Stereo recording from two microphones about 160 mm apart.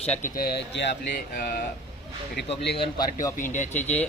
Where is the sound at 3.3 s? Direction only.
55° left (ahead or behind).